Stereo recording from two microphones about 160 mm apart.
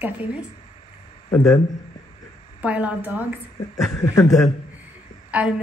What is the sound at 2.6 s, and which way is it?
A woman's voice, 10° right (ahead or behind).